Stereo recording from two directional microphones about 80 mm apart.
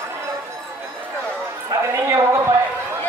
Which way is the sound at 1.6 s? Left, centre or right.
Right.